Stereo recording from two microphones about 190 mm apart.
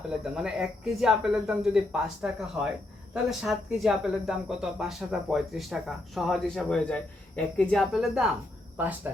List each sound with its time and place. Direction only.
0.3 s speech: centre (ahead or behind)